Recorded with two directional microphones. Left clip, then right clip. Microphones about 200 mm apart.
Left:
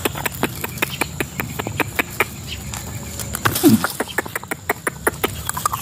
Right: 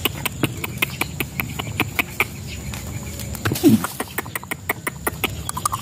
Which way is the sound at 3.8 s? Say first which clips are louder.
Left 5 dB; 50° right (ahead or behind).